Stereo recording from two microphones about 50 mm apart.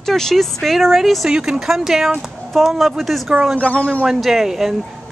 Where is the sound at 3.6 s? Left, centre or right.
Left.